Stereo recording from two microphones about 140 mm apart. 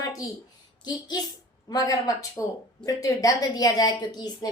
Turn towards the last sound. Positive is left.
turn(degrees=30)  # may be behind; listen again after turning